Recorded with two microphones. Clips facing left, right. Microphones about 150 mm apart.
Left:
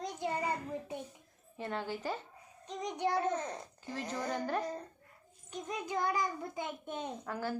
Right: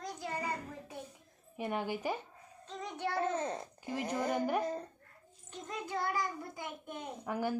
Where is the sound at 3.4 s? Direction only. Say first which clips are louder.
Right 3 dB; 15° right (ahead or behind).